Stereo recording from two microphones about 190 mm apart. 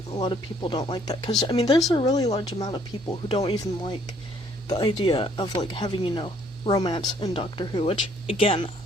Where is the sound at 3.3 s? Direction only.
30° left (ahead or behind).